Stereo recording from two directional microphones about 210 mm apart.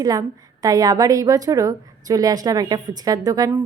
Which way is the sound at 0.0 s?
15° right (ahead or behind).